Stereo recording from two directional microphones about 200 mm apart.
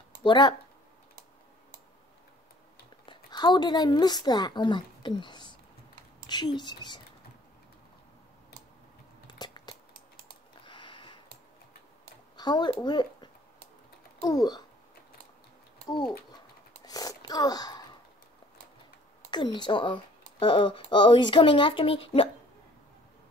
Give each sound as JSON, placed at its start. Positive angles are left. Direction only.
{"t": 0.2, "sound": "speech", "side_deg": 25}
{"t": 3.1, "sound": "speech", "side_deg": 20}
{"t": 9.3, "sound": "a sound", "side_deg": 20}
{"t": 12.4, "sound": "a child's voice", "side_deg": 20}
{"t": 16.8, "sound": "a sound", "side_deg": 20}
{"t": 19.3, "sound": "speech", "side_deg": 25}